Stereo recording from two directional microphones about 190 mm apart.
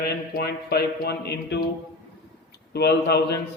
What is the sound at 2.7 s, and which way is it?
Speech, 60° left (ahead or behind).